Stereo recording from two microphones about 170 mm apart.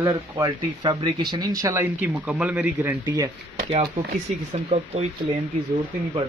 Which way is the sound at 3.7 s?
40° right (ahead or behind).